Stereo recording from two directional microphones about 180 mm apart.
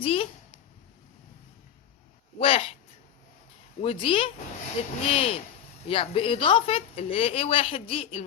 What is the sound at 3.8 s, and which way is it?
A woman's voice, 30° left (ahead or behind).